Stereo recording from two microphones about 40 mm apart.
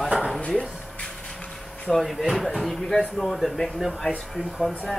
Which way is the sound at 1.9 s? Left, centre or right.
Centre.